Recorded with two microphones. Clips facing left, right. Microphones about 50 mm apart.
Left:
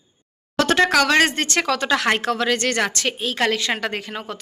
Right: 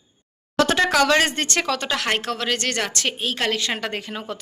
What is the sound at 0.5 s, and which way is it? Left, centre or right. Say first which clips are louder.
Speech: left 1 dB; left.